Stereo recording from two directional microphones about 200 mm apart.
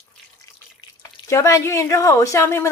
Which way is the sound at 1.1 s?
15° left (ahead or behind).